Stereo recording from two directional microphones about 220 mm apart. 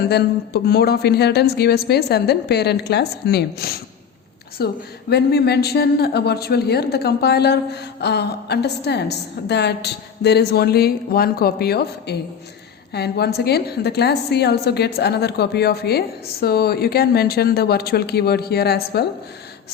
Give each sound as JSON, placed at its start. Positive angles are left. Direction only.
{"t": 0.1, "sound": "a woman's voice", "side_deg": 45}